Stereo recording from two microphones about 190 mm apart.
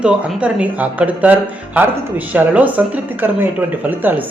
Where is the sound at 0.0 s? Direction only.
5° right (ahead or behind).